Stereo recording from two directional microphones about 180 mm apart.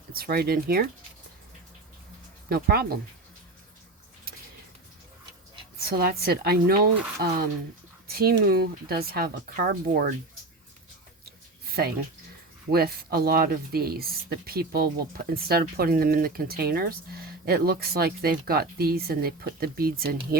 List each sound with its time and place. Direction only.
0.1 s speech: 60° right (ahead or behind)
2.5 s speech: 60° right (ahead or behind)
5.8 s speech: 60° right (ahead or behind)
11.7 s speech: 60° right (ahead or behind)